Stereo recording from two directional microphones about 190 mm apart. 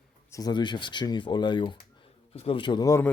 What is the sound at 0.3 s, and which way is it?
Speech, 20° left (ahead or behind).